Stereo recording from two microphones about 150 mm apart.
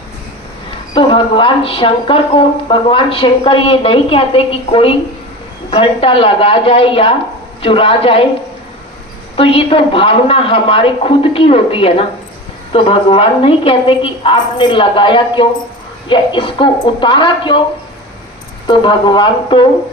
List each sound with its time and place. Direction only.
0.9 s speech: 35° left (ahead or behind)
9.3 s speech: 40° left (ahead or behind)
18.7 s speech: 35° left (ahead or behind)